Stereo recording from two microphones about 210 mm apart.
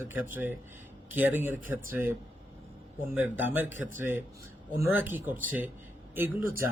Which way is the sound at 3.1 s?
10° right (ahead or behind).